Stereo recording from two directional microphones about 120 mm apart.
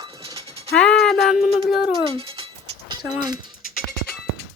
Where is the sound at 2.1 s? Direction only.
50° right (ahead or behind).